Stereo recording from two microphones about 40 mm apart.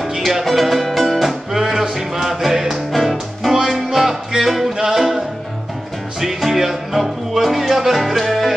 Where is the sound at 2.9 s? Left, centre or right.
Centre.